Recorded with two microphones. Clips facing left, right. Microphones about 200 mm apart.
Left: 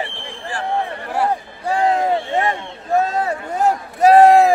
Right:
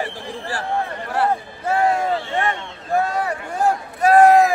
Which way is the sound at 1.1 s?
15° left (ahead or behind).